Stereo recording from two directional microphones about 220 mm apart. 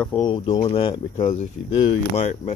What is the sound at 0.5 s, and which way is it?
Speech, 30° left (ahead or behind).